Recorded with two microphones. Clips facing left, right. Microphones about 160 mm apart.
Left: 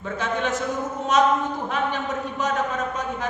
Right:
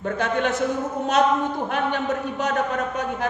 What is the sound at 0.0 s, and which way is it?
Speech, 60° right (ahead or behind).